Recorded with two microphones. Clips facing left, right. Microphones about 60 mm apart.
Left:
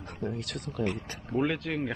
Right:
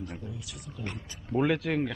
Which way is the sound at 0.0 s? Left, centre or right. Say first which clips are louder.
Left 5 dB; left.